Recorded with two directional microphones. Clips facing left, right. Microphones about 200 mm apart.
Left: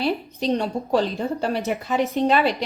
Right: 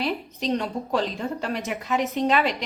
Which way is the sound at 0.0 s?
30° left (ahead or behind).